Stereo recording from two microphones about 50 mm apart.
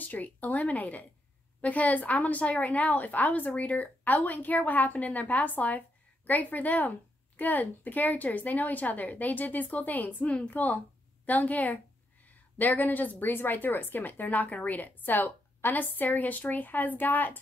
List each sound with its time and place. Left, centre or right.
0.0 s a woman's voice: left